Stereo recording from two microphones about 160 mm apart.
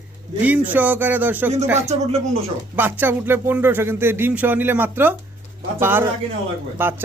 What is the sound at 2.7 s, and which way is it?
Speech, 10° right (ahead or behind).